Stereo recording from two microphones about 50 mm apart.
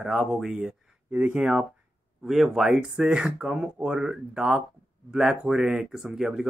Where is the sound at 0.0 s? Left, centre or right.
Centre.